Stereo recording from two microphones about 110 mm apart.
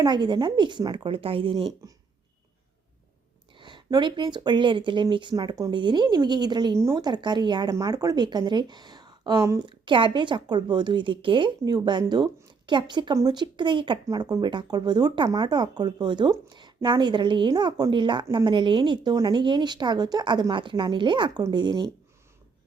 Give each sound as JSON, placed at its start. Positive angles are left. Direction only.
{"t": 0.0, "sound": "a woman's voice", "side_deg": -45}
{"t": 1.8, "sound": "speech", "side_deg": -30}
{"t": 3.6, "sound": "speech", "side_deg": -45}
{"t": 5.3, "sound": "a woman's voice", "side_deg": -35}